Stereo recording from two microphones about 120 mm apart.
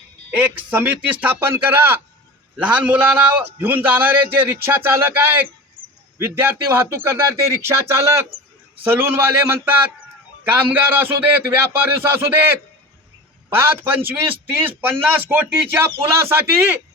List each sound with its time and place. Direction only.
0.3 s a man's voice: 15° right (ahead or behind)